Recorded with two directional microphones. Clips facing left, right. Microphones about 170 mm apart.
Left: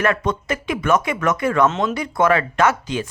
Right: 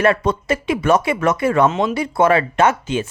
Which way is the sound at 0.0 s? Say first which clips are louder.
Right 4 dB; 30° right (ahead or behind).